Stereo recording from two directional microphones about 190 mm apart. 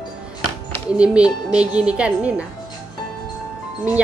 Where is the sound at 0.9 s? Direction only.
5° right (ahead or behind).